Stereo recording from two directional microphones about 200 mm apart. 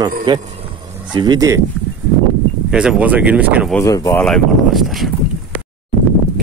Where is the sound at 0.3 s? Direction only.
25° right (ahead or behind).